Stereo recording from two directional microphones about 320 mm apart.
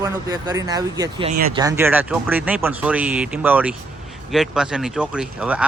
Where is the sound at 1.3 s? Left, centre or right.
Right.